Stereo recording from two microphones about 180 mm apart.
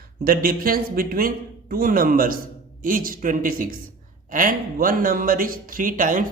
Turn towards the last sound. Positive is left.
turn(degrees=-45)  # may be behind; listen again after turning